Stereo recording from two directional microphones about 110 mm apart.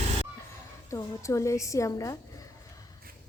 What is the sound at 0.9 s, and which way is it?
A woman's voice, 25° left (ahead or behind).